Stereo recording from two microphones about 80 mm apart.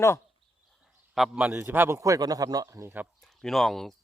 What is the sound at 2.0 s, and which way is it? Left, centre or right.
Speech, right.